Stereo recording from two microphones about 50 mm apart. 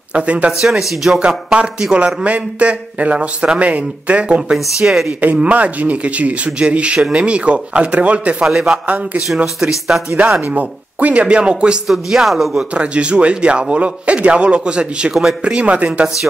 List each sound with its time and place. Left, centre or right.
0.1 s a man's voice: right
0.5 s speech: centre
1.2 s a man's voice: centre
4.6 s speech: centre
5.2 s a man's voice: right
8.5 s speech: centre
8.8 s a man's voice: right
9.3 s speech: centre
10.4 s a man's voice: right
11.9 s speech: centre
12.5 s a man's voice: right